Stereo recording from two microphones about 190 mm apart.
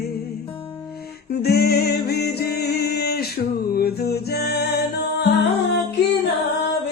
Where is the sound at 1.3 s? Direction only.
55° left (ahead or behind).